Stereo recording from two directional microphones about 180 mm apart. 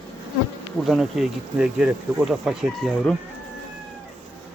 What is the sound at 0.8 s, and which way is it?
Speech, centre (ahead or behind).